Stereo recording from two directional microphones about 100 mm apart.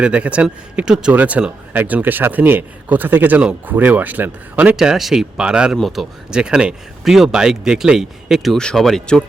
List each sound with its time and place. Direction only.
0.0 s speech: 10° right (ahead or behind); by 9.2 s 5° left (ahead or behind)